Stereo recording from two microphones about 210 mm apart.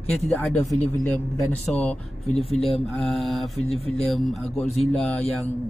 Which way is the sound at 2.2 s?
30° left (ahead or behind).